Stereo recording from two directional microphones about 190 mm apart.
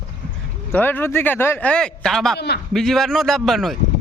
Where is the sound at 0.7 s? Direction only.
10° left (ahead or behind).